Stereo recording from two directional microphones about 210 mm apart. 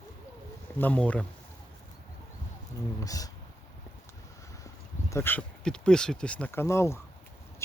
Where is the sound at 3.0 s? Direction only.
15° left (ahead or behind).